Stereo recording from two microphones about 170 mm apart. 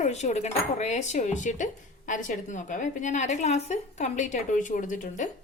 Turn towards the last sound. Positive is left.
turn(degrees=50)  # may be behind; listen again after turning